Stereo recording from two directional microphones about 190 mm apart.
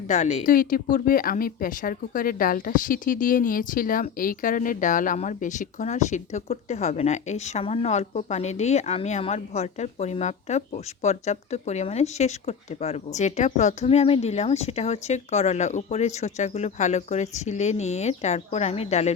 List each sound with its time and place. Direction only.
0.1 s speech: 35° left (ahead or behind)